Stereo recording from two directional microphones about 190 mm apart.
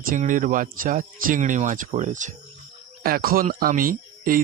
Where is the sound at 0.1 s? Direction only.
45° right (ahead or behind).